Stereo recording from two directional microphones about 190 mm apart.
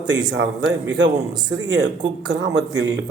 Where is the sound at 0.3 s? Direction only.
65° right (ahead or behind).